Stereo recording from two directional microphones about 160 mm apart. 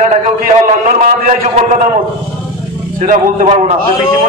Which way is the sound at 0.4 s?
60° right (ahead or behind).